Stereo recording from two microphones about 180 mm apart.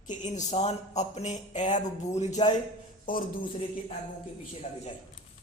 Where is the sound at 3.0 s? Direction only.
50° left (ahead or behind).